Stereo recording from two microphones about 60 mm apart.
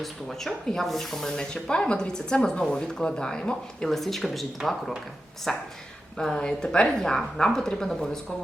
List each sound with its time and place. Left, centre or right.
0.0 s speech: centre
3.8 s speech: centre